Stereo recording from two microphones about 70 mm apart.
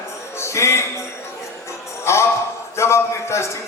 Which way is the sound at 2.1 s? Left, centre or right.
Left.